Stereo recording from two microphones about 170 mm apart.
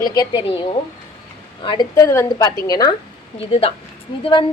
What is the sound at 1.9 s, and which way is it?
A woman's voice, 15° left (ahead or behind).